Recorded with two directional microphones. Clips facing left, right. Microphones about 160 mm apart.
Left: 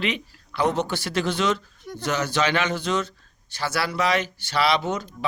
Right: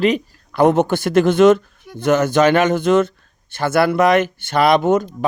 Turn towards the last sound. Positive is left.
turn(degrees=-50)  # may be behind; listen again after turning